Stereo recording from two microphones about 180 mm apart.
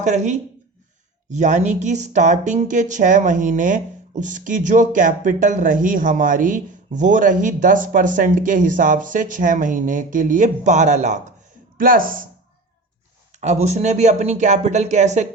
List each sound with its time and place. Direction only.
0.0 s speech: 40° right (ahead or behind)
13.4 s speech: 40° right (ahead or behind)